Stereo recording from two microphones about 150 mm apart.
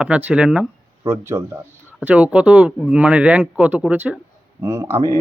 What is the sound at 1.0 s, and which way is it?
Speech, 20° right (ahead or behind).